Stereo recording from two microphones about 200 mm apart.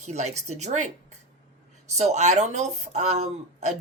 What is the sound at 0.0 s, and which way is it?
Speech, 35° right (ahead or behind).